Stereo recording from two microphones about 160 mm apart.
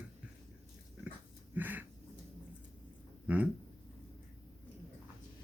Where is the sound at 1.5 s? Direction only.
10° right (ahead or behind).